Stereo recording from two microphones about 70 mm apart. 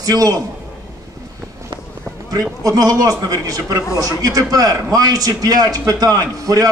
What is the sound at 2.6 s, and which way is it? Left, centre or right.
A man's voice, right.